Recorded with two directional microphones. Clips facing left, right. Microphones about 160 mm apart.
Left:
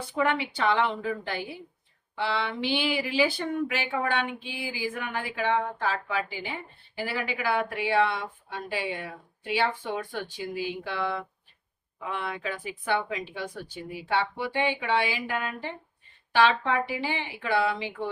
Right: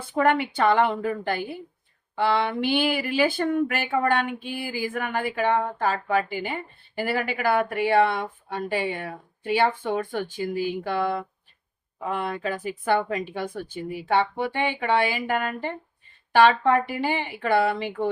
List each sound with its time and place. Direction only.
0.2 s speech: 50° right (ahead or behind)